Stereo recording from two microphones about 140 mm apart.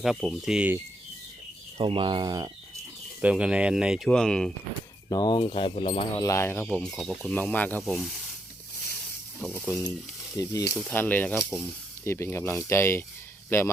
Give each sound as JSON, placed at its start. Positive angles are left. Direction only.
{"t": 0.0, "sound": "speech", "side_deg": 0}
{"t": 1.8, "sound": "speech", "side_deg": -35}
{"t": 3.2, "sound": "speech", "side_deg": -10}
{"t": 5.0, "sound": "speech", "side_deg": 30}
{"t": 6.1, "sound": "speech", "side_deg": 20}
{"t": 9.4, "sound": "speech", "side_deg": 10}
{"t": 10.3, "sound": "speech", "side_deg": 25}
{"t": 10.8, "sound": "speech", "side_deg": 10}